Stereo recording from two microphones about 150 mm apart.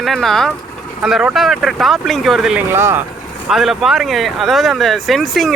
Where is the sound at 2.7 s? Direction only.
15° right (ahead or behind).